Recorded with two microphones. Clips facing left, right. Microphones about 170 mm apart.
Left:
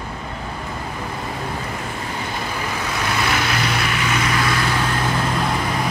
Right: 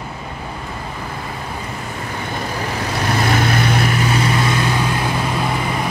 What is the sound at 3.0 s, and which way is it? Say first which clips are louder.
Vehicle: right 5 dB; 40° right (ahead or behind).